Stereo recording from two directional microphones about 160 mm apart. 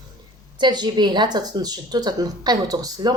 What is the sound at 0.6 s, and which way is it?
Speech, 25° right (ahead or behind).